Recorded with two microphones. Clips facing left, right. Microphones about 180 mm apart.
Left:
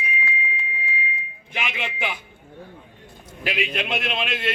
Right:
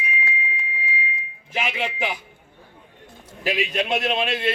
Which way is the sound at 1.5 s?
35° right (ahead or behind).